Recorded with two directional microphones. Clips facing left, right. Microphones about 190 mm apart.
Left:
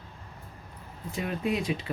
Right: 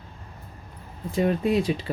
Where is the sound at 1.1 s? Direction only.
35° right (ahead or behind).